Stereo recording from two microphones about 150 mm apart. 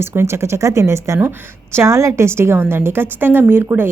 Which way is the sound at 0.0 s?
15° right (ahead or behind).